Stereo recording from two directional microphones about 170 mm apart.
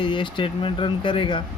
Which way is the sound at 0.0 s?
30° left (ahead or behind).